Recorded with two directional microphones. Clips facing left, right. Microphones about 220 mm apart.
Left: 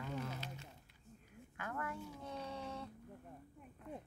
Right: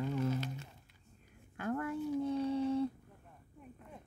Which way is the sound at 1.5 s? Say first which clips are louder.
Right 9 dB; 35° right (ahead or behind).